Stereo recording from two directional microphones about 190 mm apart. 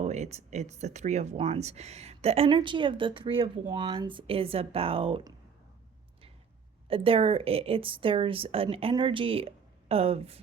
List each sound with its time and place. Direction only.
0.0 s speech: 35° right (ahead or behind)
6.8 s speech: 30° right (ahead or behind)